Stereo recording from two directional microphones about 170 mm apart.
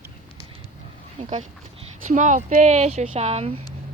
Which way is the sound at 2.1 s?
45° right (ahead or behind).